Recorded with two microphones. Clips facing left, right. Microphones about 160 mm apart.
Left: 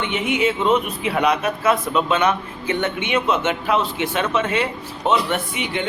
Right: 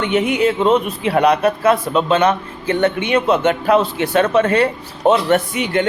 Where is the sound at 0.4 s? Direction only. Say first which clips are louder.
Right 2 dB; 35° right (ahead or behind).